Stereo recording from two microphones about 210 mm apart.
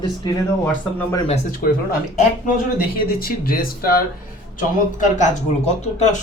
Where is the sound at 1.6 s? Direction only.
40° left (ahead or behind).